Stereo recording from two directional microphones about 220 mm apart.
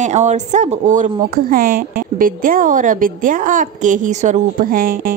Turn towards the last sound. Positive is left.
turn(degrees=-40)  # may be behind; listen again after turning